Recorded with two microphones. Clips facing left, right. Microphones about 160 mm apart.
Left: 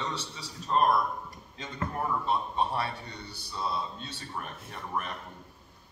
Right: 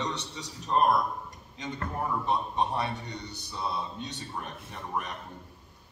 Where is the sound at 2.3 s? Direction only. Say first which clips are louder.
Right 2 dB; 20° right (ahead or behind).